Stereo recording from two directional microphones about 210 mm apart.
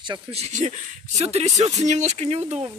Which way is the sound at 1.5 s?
15° right (ahead or behind).